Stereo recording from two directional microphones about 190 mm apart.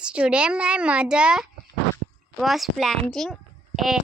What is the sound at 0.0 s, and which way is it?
A woman's voice, 5° right (ahead or behind).